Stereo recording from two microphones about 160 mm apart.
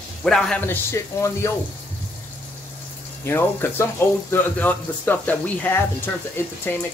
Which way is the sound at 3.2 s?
15° left (ahead or behind).